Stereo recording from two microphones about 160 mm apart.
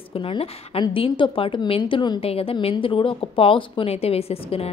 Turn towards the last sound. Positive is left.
turn(degrees=40)  # may be behind; listen again after turning